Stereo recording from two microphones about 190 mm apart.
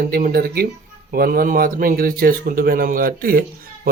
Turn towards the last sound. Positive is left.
turn(degrees=-50)  # may be behind; listen again after turning